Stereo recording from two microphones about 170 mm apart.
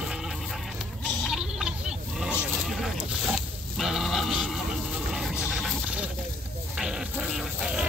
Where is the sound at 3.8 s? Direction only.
Centre (ahead or behind).